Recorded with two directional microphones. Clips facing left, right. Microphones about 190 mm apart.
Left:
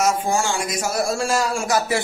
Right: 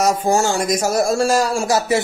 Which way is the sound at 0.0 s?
40° right (ahead or behind).